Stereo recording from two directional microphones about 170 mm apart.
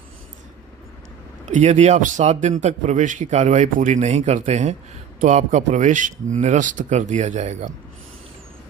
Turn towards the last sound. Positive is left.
turn(degrees=-45)  # may be behind; listen again after turning